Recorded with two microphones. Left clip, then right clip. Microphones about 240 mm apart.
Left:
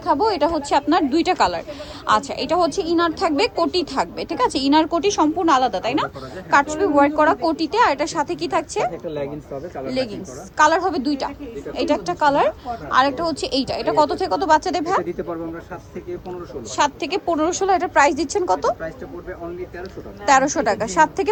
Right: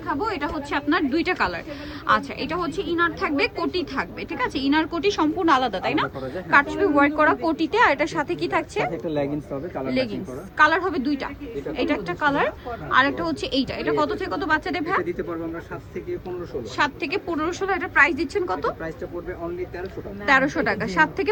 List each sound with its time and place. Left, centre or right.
0.0 s speech: left
2.7 s a woman's voice: left; by 9.1 s centre
10.6 s a woman's voice: centre
16.7 s speech: centre
20.2 s a woman's voice: centre